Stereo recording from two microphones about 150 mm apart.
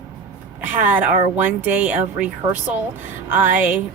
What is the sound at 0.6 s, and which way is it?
Speech, 10° right (ahead or behind).